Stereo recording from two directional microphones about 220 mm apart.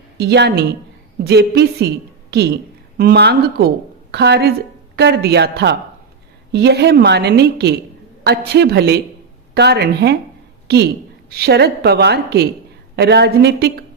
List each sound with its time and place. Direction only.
0.2 s a woman's voice: 50° right (ahead or behind)